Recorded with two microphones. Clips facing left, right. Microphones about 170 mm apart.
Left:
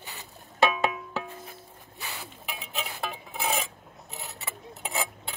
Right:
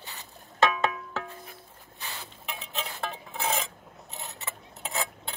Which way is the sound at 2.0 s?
15° left (ahead or behind).